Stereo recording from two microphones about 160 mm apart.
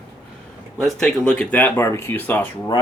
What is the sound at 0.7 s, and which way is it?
Speech, 5° left (ahead or behind).